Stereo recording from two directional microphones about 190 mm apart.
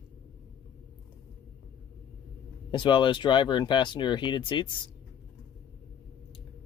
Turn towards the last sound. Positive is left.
turn(degrees=25)  # may be behind; listen again after turning